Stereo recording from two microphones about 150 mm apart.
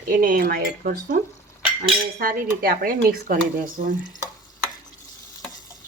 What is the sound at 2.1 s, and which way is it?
Speech, 80° right.